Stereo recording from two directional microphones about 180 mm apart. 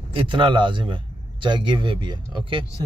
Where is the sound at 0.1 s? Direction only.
30° right (ahead or behind).